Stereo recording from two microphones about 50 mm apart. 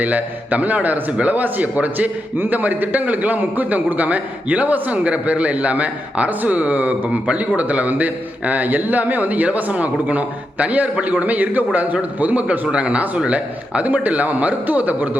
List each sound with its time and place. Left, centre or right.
0.0 s a man's voice: right